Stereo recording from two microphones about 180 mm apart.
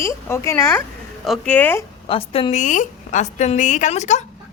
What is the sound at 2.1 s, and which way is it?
A woman's voice, 30° left (ahead or behind).